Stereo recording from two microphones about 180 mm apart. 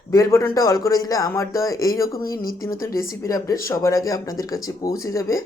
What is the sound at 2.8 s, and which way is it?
Speech, 15° left (ahead or behind).